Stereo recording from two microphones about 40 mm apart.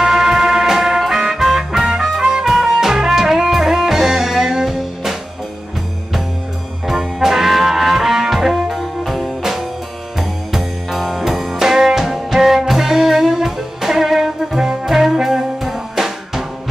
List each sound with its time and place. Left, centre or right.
0.0 s music: centre
6.9 s brass instrument: centre
9.4 s music: centre